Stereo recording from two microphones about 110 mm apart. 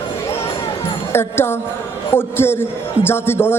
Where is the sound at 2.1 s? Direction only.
20° left (ahead or behind).